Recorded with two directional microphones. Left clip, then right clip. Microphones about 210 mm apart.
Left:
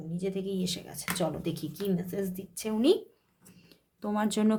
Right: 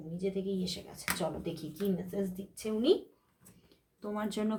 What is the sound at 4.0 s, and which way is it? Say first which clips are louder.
Speech: left 6 dB; 30° left (ahead or behind).